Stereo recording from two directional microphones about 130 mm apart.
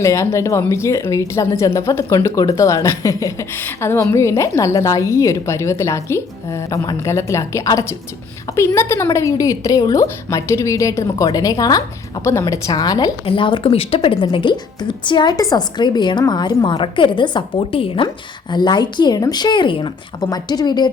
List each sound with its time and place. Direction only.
0.0 s a woman's voice: 20° left (ahead or behind)
13.2 s speech: 40° left (ahead or behind)